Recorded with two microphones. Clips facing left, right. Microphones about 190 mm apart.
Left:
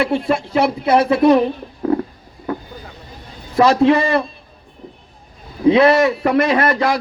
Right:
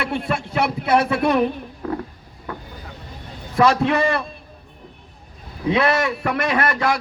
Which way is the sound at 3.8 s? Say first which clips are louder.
Left 5 dB; 20° left (ahead or behind).